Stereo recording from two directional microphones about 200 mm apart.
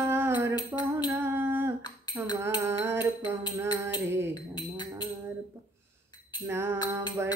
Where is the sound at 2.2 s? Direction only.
10° right (ahead or behind).